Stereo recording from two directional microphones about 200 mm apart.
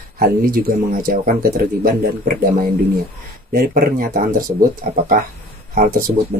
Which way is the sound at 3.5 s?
45° right (ahead or behind).